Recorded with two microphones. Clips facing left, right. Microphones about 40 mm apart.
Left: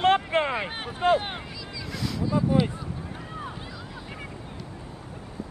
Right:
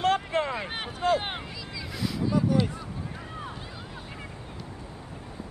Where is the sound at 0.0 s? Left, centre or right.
Left.